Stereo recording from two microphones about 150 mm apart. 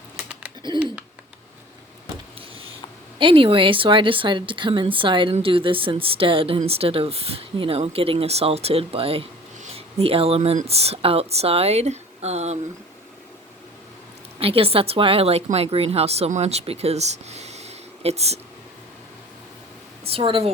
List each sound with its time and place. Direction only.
3.2 s speech: 35° right (ahead or behind)
14.3 s speech: 40° right (ahead or behind)
20.1 s speech: 40° right (ahead or behind)